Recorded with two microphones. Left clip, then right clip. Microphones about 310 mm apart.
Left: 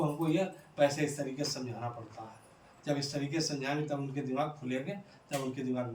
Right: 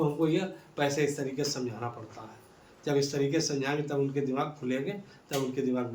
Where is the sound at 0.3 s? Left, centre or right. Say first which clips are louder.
Left 1 dB; centre.